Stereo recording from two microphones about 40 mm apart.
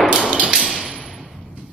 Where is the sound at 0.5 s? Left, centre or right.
Centre.